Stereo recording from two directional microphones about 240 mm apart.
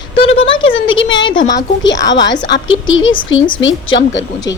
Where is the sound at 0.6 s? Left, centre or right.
Left.